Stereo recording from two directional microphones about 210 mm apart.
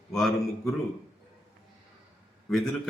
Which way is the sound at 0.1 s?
Centre (ahead or behind).